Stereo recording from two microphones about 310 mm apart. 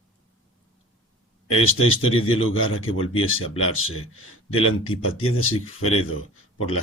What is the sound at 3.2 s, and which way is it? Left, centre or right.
Speech, left.